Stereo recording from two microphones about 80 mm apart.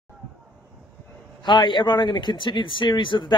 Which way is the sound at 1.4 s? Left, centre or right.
Left.